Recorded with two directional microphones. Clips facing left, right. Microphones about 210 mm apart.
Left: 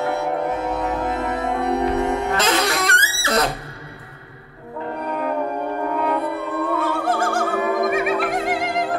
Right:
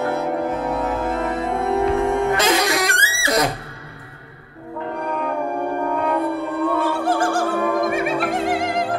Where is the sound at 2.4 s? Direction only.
15° right (ahead or behind).